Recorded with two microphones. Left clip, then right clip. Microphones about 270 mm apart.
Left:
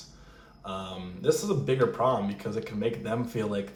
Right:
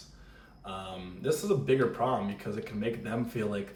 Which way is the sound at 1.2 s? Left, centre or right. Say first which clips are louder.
Left 2 dB; centre.